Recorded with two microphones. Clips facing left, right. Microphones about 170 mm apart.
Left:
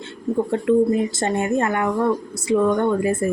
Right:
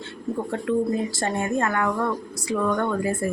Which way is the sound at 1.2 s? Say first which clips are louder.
Left 4 dB; 20° left (ahead or behind).